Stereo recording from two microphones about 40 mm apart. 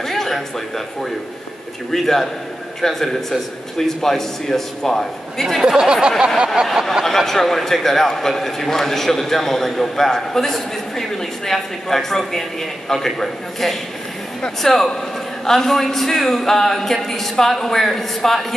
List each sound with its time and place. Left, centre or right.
0.0 s speech: centre
1.9 s a man's voice: centre
5.7 s speech: centre
6.9 s a man's voice: centre